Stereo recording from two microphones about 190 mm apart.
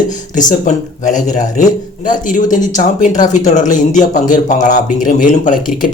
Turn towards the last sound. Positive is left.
turn(degrees=40)  # may be behind; listen again after turning